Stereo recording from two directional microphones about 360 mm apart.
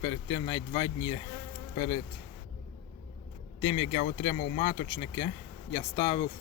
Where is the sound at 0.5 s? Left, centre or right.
Centre.